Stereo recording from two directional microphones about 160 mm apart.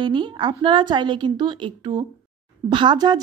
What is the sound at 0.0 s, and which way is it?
A woman's voice, 30° right (ahead or behind).